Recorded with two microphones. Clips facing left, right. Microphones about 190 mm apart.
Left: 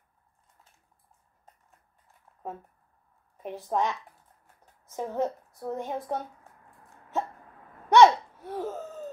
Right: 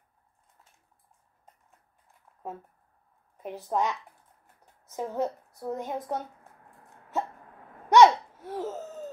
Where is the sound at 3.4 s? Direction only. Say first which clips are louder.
Left 1 dB; 10° right (ahead or behind).